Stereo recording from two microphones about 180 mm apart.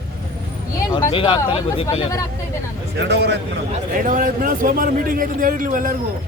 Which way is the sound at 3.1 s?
70° right (ahead or behind).